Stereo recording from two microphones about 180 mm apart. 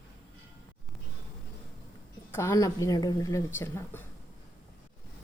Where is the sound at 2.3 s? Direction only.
15° left (ahead or behind).